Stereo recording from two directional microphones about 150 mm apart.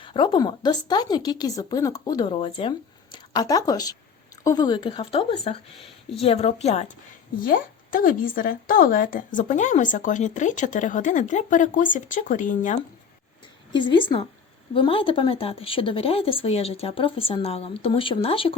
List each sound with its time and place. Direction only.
0.0 s a woman's voice: 30° left (ahead or behind)
7.3 s speech: 70° left (ahead or behind)
13.7 s speech: 35° left (ahead or behind)